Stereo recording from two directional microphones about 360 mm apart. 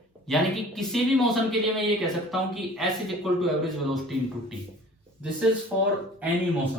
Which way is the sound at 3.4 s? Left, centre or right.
Centre.